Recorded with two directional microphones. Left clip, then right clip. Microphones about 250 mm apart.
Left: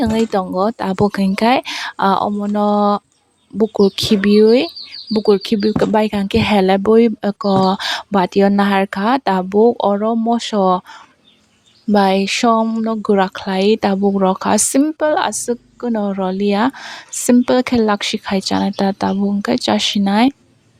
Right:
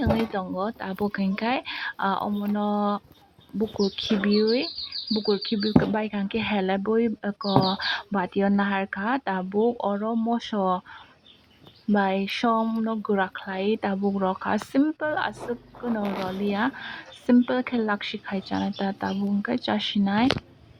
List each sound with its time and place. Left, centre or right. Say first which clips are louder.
0.0 s speech: left 9 dB; left
11.9 s speech: left 10 dB; left